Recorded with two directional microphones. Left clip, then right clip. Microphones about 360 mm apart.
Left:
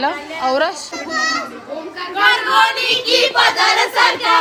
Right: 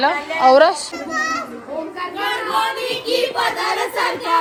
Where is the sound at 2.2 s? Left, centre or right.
Centre.